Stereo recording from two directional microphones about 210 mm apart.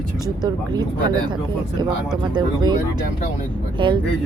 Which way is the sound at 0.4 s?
20° right (ahead or behind).